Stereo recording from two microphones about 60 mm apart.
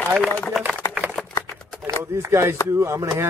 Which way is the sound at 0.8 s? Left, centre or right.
Left.